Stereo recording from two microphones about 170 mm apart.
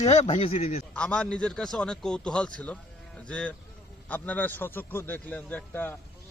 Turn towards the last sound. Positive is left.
turn(degrees=15)  # may be behind; listen again after turning